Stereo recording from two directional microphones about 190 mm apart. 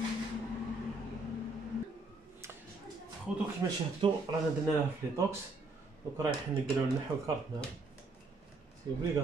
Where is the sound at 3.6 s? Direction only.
20° right (ahead or behind).